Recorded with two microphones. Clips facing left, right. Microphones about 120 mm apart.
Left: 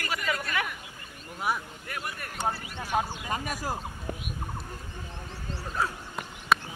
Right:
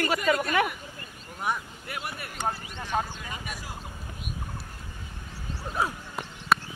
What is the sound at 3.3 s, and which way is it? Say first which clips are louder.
Speech: left 7 dB; 45° left (ahead or behind).